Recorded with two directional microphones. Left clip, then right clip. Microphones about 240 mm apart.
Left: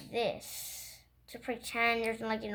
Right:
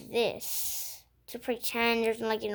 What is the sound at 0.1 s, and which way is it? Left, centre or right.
Speech, right.